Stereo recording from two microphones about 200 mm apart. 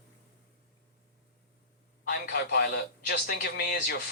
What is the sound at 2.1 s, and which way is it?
A man's voice, 50° left (ahead or behind).